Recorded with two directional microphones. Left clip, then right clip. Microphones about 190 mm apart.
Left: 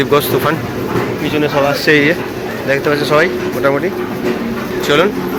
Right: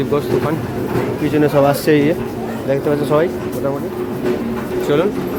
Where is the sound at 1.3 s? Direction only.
35° right (ahead or behind).